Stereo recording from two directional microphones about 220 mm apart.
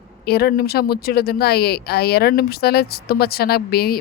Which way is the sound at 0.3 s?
45° left (ahead or behind).